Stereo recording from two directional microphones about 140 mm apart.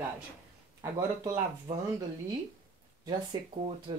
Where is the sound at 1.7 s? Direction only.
35° right (ahead or behind).